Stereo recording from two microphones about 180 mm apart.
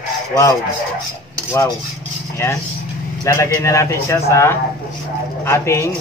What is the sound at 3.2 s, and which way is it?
A man's voice, 15° left (ahead or behind).